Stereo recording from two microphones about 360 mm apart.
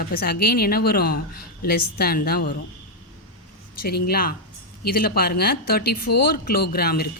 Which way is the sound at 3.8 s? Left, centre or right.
Left.